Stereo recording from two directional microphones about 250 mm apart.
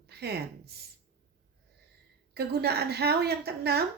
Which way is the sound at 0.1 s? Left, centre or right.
Right.